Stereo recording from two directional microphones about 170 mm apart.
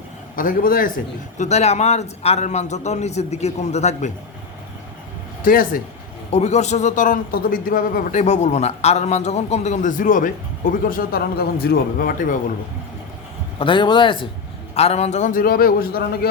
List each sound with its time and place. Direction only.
0.3 s a man's voice: 55° left (ahead or behind)
5.4 s speech: 55° left (ahead or behind)
6.3 s speech: 40° left (ahead or behind)
13.6 s a man's voice: 30° left (ahead or behind); by 16.3 s 60° left (ahead or behind)